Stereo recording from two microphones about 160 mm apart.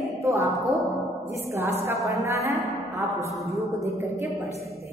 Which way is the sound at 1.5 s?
15° right (ahead or behind).